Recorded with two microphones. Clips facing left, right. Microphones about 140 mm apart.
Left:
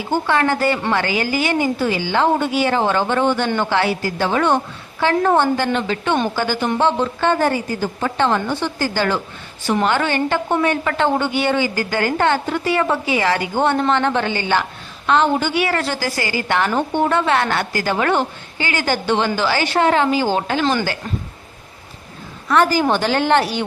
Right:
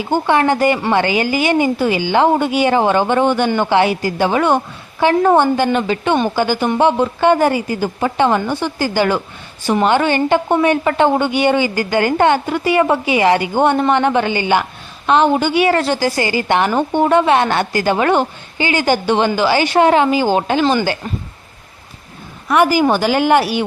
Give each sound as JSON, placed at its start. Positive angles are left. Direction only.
{"t": 0.1, "sound": "a woman's voice", "side_deg": -20}
{"t": 22.4, "sound": "a woman's voice", "side_deg": -10}